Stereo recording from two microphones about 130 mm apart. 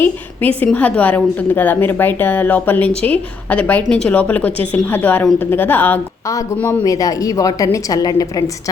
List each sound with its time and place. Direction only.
0.0 s a woman's voice: 15° left (ahead or behind)
6.8 s a woman's voice: 25° left (ahead or behind)